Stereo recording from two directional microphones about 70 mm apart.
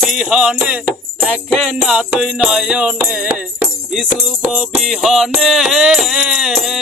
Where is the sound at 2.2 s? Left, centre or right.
Centre.